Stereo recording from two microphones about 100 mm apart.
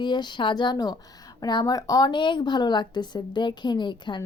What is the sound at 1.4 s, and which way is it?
Speech, 40° left (ahead or behind).